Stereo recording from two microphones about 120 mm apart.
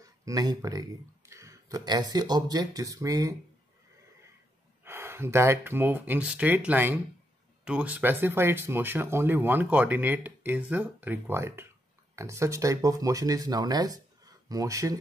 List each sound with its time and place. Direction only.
0.0 s speech: 30° right (ahead or behind)
4.8 s speech: 20° right (ahead or behind)